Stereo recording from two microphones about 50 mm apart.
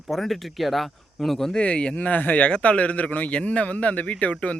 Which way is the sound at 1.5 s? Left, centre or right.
Left.